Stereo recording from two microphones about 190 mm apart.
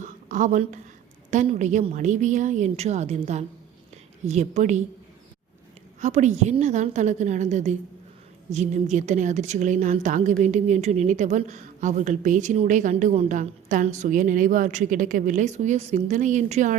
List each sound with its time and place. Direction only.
0.0 s a sound: 40° right (ahead or behind)
1.3 s a woman's voice: 40° right (ahead or behind)
6.0 s a woman's voice: 40° right (ahead or behind)